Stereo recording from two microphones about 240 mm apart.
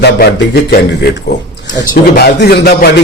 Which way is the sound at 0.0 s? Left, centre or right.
Left.